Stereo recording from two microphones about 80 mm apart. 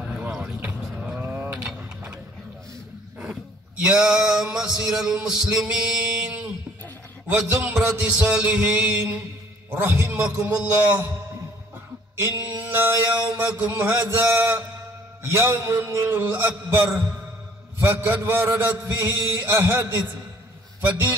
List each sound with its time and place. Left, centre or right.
1.2 s mechanisms: right
1.5 s mechanisms: centre
3.8 s a sound: centre
7.4 s mantra: right
7.7 s a sound: centre
9.7 s mantra: right
12.2 s mantra: right
15.2 s a sound: right
20.8 s mantra: right